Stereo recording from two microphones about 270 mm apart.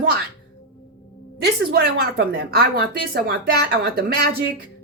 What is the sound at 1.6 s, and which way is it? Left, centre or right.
Speech, right.